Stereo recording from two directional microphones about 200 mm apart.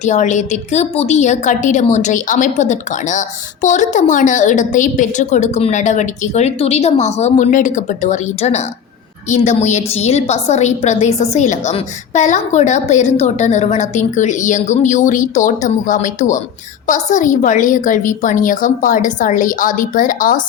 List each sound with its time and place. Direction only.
0.0 s a woman's voice: 35° left (ahead or behind)